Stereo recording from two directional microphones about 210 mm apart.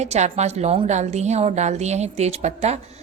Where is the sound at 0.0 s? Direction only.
30° right (ahead or behind).